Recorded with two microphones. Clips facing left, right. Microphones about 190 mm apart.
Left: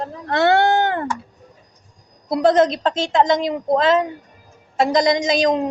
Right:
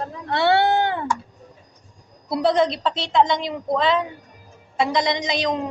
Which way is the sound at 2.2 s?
45° left (ahead or behind).